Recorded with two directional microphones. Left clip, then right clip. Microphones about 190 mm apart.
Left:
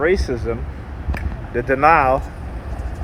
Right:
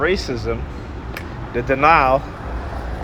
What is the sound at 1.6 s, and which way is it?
Speech, 25° left (ahead or behind).